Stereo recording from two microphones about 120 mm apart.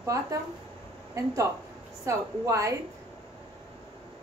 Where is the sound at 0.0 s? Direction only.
30° right (ahead or behind).